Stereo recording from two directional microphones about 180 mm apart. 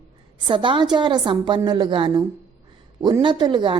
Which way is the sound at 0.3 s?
25° right (ahead or behind).